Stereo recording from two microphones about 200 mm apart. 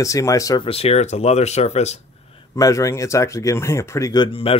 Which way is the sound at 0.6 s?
30° left (ahead or behind).